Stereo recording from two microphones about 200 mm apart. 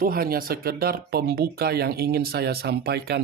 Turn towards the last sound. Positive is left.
turn(degrees=-55)  # may be behind; listen again after turning